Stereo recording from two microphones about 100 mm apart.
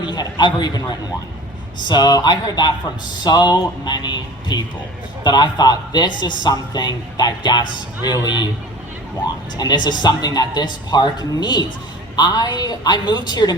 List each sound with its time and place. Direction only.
0.0 s a man's voice: 50° left (ahead or behind)
9.6 s a man's voice: 45° left (ahead or behind)